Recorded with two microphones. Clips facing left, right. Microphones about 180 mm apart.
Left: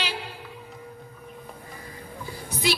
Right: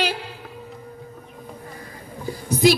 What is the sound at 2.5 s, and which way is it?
Music, 45° right (ahead or behind).